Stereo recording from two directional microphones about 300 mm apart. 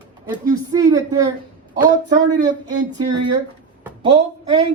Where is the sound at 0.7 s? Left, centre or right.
Centre.